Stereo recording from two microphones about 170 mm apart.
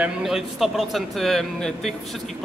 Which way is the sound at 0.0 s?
Centre (ahead or behind).